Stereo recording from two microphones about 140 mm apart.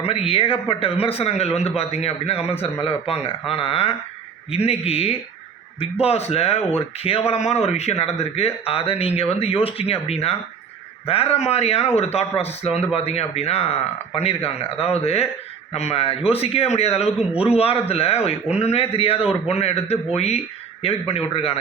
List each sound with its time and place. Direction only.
0.3 s a man's voice: 40° left (ahead or behind)